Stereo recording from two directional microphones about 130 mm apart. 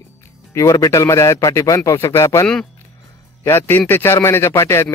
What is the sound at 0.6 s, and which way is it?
Speech, 25° left (ahead or behind).